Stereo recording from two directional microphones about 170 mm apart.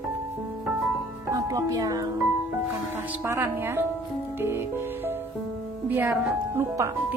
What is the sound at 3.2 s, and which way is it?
Speech, 15° right (ahead or behind).